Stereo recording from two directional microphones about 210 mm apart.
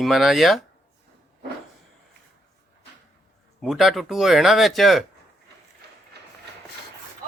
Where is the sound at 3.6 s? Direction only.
Centre (ahead or behind).